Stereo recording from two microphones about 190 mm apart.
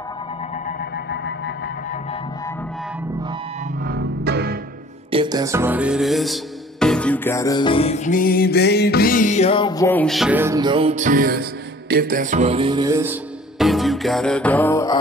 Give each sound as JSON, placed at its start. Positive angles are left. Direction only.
{"t": 3.8, "sound": "music", "side_deg": -55}
{"t": 5.1, "sound": "music", "side_deg": -20}
{"t": 9.8, "sound": "music", "side_deg": 5}